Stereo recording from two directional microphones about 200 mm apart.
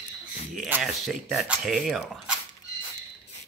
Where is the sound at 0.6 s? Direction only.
5° right (ahead or behind).